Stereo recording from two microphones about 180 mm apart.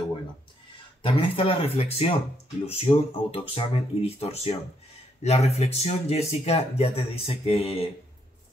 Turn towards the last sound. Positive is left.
turn(degrees=35)  # may be behind; listen again after turning